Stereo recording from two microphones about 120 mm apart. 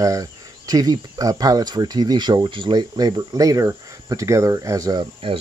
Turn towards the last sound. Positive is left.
turn(degrees=-35)  # may be behind; listen again after turning